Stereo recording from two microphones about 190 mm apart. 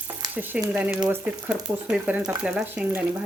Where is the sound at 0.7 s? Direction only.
10° right (ahead or behind).